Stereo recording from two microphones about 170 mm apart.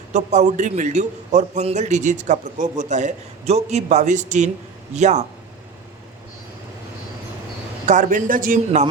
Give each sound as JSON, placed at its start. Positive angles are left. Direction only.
{"t": 0.1, "sound": "a man's voice", "side_deg": -45}
{"t": 7.9, "sound": "a man's voice", "side_deg": -50}